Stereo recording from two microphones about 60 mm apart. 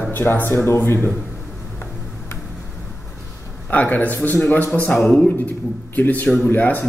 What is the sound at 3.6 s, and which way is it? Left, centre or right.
Speech, left.